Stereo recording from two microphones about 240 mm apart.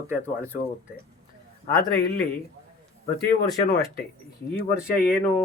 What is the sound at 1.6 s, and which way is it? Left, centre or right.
Speech, left.